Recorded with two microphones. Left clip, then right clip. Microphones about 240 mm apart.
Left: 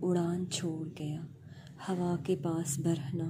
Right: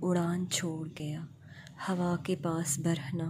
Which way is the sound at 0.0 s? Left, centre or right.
Right.